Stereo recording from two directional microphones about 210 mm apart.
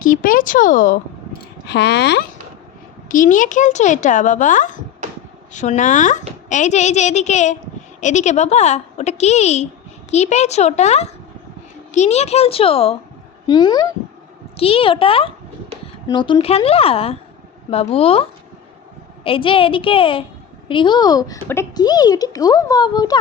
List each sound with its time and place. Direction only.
0.0 s speech: 40° left (ahead or behind)
1.6 s speech: 55° left (ahead or behind)
3.1 s speech: 40° left (ahead or behind); by 23.1 s 20° left (ahead or behind)